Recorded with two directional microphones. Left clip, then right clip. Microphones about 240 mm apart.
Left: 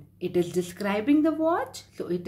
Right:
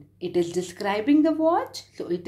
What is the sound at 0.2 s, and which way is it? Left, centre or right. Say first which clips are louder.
A woman's voice: right 1 dB; centre.